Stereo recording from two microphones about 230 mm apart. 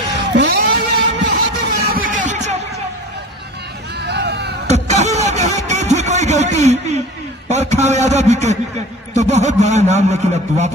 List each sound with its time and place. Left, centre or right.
0.1 s vehicle: right
2.0 s music: right
4.1 s chop: right
4.6 s vehicle: right
7.4 s a sound: right
9.1 s a man's voice: right